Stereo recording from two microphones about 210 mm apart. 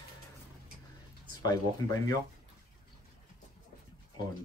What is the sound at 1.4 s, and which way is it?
Speech, 20° left (ahead or behind).